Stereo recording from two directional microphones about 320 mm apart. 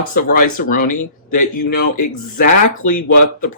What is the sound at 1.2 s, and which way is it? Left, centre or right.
Speech, left.